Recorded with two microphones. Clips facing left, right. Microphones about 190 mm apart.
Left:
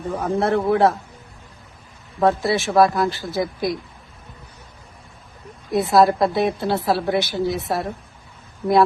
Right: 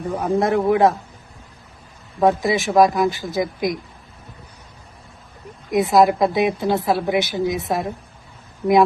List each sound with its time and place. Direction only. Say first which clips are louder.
0.2 s speech: right 2 dB; 15° right (ahead or behind)
2.2 s speech: right 1 dB; 15° right (ahead or behind)
5.7 s speech: right 1 dB; 15° right (ahead or behind)